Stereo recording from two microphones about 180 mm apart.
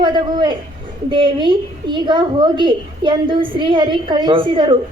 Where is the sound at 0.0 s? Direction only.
25° right (ahead or behind).